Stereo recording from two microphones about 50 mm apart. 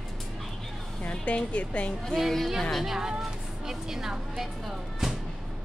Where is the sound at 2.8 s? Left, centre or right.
Centre.